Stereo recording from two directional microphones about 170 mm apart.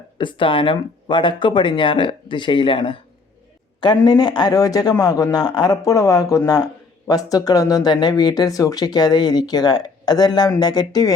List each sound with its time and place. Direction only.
0.2 s speech: 30° left (ahead or behind)